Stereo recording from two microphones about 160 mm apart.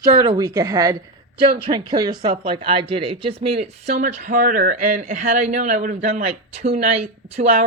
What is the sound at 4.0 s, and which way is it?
Speech, 50° right (ahead or behind).